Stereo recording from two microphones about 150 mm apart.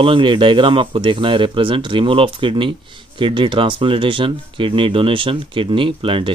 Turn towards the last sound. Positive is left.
turn(degrees=-35)  # may be behind; listen again after turning